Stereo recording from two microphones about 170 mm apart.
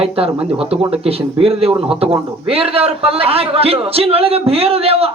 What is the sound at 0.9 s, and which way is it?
A man's voice, 35° right (ahead or behind).